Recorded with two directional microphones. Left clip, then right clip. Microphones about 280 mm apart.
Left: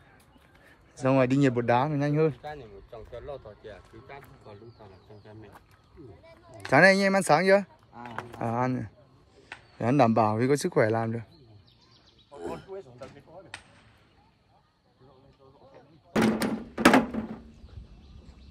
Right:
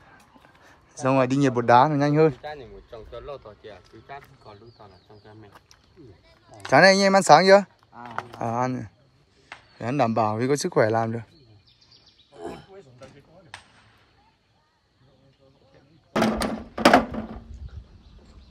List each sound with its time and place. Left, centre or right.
0.9 s speech: centre
2.4 s speech: right
5.2 s speech: centre
12.4 s roaring cats: centre
16.4 s a sound: centre